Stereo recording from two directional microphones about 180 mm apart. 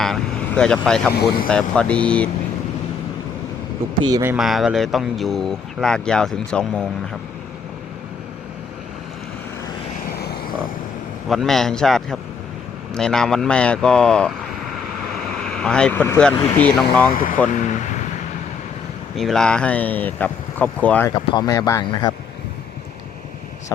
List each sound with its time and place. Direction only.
0.0 s speech: 5° left (ahead or behind)
1.1 s speech: 65° left (ahead or behind)
1.5 s speech: 5° left (ahead or behind)
4.0 s speech: 15° right (ahead or behind)
4.4 s speech: centre (ahead or behind)
11.3 s speech: centre (ahead or behind)
15.4 s speech: 5° left (ahead or behind)
19.1 s speech: centre (ahead or behind)
21.1 s speech: 20° left (ahead or behind)